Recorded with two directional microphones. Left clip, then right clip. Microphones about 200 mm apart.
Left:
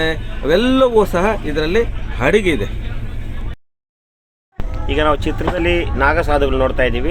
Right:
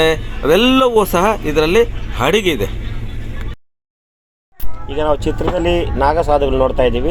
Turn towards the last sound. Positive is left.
turn(degrees=-5)  # may be behind; listen again after turning